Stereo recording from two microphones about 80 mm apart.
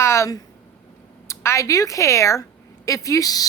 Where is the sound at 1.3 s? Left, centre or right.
Left.